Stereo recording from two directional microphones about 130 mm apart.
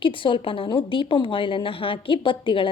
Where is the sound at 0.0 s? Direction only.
40° left (ahead or behind).